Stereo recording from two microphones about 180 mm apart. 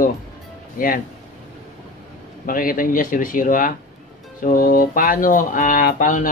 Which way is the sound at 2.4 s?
50° left (ahead or behind).